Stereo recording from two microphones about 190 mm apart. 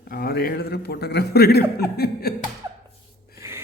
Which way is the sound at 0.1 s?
55° left (ahead or behind).